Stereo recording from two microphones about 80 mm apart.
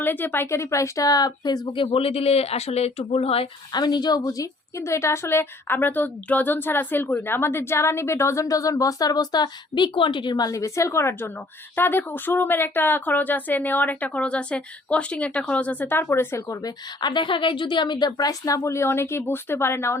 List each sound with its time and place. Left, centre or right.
0.0 s a woman's voice: left
3.7 s speech: left
4.8 s a woman's voice: left
16.6 s a woman's voice: left